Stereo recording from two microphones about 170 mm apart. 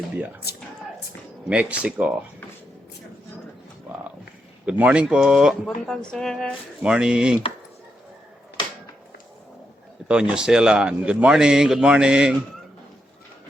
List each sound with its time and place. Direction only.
1.5 s speech: 5° right (ahead or behind)
4.6 s speech: 5° right (ahead or behind)
10.1 s speech: 5° right (ahead or behind)